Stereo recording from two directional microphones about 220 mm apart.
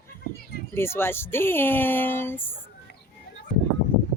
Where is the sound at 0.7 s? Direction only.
10° left (ahead or behind).